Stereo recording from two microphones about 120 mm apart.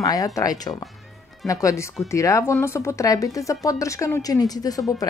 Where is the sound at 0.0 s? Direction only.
30° left (ahead or behind).